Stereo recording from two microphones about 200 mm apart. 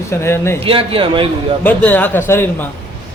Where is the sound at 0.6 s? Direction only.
25° right (ahead or behind).